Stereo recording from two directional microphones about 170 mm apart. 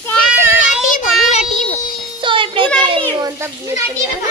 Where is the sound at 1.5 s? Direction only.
40° left (ahead or behind).